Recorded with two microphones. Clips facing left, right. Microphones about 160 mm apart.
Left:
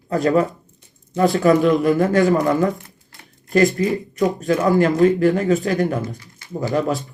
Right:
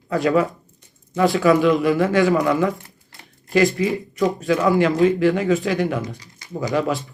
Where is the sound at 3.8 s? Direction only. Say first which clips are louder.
Left 1 dB; centre (ahead or behind).